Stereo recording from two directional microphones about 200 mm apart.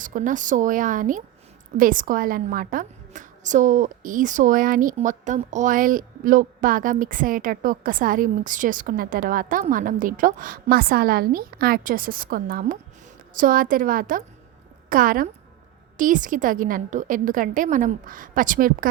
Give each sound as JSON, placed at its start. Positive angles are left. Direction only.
{"t": 0.0, "sound": "a woman's voice", "side_deg": -40}